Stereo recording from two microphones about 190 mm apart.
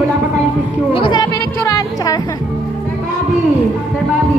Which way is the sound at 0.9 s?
25° left (ahead or behind).